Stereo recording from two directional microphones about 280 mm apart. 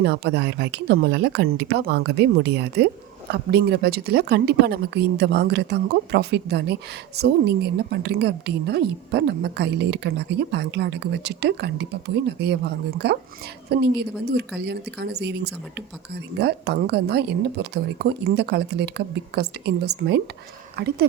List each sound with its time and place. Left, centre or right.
0.0 s speech: right